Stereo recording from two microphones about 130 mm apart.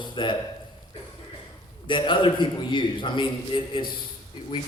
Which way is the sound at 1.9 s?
40° left (ahead or behind).